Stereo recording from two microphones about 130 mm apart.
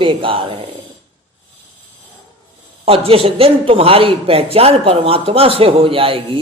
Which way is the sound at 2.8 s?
45° right (ahead or behind).